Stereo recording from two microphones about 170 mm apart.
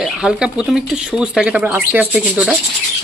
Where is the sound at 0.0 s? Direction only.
5° right (ahead or behind).